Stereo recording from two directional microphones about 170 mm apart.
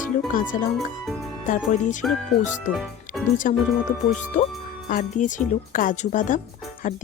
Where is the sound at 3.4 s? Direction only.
50° left (ahead or behind).